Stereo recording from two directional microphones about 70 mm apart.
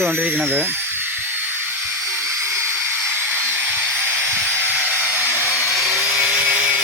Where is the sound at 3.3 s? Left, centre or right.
Right.